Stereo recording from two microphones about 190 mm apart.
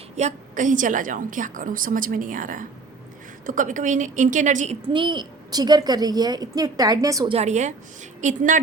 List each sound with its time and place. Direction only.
0.2 s a woman's voice: 40° right (ahead or behind)
4.9 s a woman's voice: 25° right (ahead or behind)
7.3 s a woman's voice: 35° right (ahead or behind)